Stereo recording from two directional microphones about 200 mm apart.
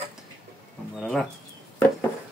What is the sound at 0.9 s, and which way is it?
Speech, centre (ahead or behind).